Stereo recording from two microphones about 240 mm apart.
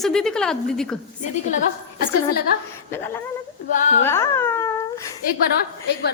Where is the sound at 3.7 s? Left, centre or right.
Left.